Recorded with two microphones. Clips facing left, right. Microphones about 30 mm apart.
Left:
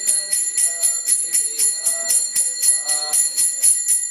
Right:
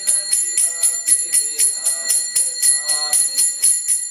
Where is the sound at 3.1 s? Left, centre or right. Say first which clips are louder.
Right 2 dB; right.